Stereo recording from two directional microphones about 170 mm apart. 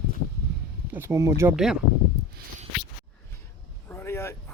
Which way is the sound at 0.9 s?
15° right (ahead or behind).